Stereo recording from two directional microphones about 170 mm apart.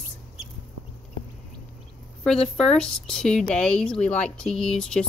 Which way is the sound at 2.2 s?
5° left (ahead or behind).